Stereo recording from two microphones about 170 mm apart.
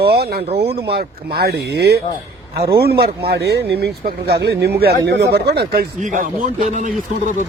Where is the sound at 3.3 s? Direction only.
75° right (ahead or behind); by 7.3 s 45° right (ahead or behind).